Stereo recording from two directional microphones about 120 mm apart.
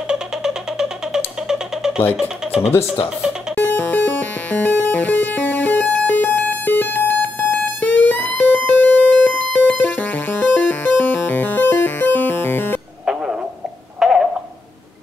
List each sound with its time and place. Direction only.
0.1 s music: 5° right (ahead or behind)
2.1 s speech: 5° right (ahead or behind)
3.5 s music: 15° left (ahead or behind)
13.9 s a sound: 5° right (ahead or behind)